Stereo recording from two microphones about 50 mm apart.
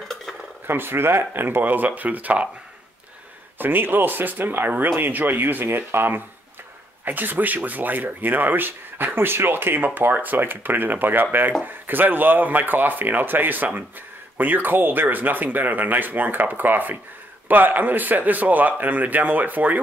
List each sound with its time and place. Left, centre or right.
0.7 s speech: right
3.5 s speech: right
7.1 s speech: right